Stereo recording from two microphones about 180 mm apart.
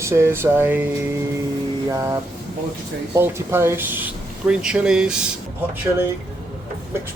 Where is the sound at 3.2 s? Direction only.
15° right (ahead or behind).